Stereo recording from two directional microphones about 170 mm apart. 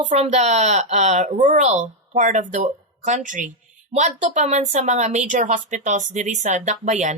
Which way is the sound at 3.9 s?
40° right (ahead or behind).